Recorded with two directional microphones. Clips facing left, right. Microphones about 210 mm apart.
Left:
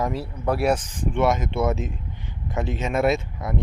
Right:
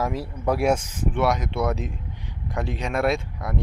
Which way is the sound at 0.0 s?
10° right (ahead or behind).